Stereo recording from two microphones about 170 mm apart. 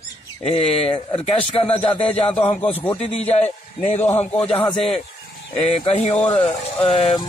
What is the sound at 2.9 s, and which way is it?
Speech, 40° left (ahead or behind).